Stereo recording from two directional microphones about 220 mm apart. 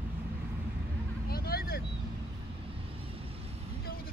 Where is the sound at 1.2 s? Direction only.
45° left (ahead or behind).